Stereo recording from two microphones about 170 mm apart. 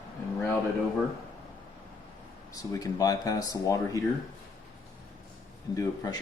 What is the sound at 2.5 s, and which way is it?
Speech, 20° left (ahead or behind).